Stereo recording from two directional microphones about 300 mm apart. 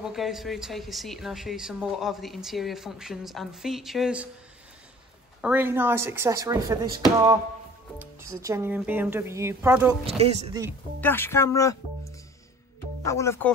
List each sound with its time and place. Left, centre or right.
0.0 s speech: centre
5.4 s speech: centre
10.0 s speech: right
11.0 s speech: centre
13.0 s speech: centre